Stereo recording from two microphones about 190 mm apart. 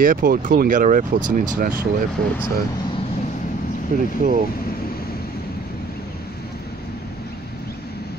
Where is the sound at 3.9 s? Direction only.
45° right (ahead or behind).